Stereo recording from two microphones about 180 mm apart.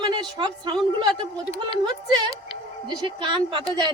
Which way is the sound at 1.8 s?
25° right (ahead or behind).